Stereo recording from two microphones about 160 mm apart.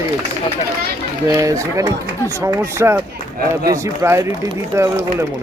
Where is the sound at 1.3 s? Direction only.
20° right (ahead or behind).